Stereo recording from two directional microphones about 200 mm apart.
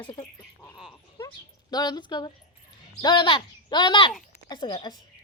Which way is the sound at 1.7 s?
20° left (ahead or behind).